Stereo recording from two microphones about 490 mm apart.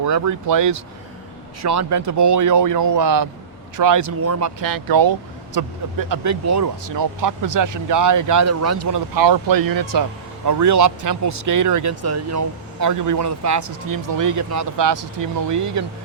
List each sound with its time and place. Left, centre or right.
0.1 s speech: right
9.1 s speech: right